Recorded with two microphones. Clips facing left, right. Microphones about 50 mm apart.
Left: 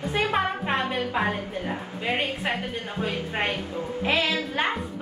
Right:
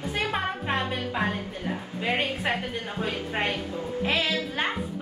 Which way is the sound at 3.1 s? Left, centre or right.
Left.